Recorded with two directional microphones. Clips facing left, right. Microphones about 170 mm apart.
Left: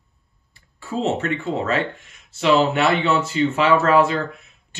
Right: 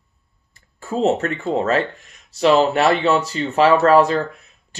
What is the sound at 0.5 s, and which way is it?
Speech, 45° right (ahead or behind).